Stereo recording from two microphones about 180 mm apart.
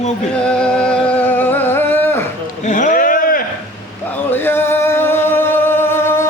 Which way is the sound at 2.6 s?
45° left (ahead or behind).